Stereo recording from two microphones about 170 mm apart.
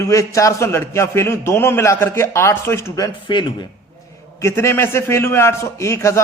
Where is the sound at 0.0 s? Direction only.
20° left (ahead or behind).